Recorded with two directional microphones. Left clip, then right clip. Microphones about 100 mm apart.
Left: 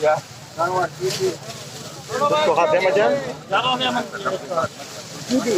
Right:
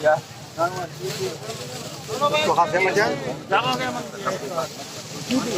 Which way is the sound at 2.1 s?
30° left (ahead or behind).